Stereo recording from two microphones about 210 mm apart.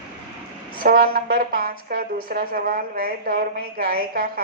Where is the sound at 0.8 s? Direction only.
45° right (ahead or behind).